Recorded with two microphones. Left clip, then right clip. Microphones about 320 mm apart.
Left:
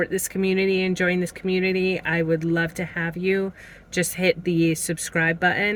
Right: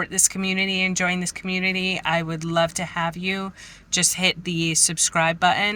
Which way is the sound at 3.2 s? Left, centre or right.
Right.